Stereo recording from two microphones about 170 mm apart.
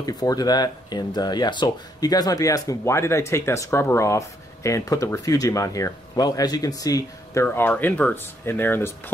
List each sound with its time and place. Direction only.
0.0 s speech: 20° left (ahead or behind)